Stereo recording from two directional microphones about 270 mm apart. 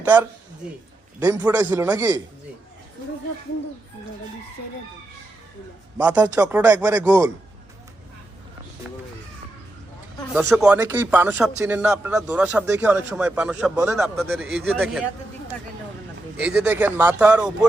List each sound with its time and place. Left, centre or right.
0.0 s speech: centre
6.0 s speech: centre
10.5 s a man's voice: centre
16.4 s a man's voice: centre